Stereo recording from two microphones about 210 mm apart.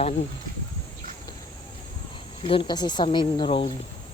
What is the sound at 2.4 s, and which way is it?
Speech, 20° left (ahead or behind).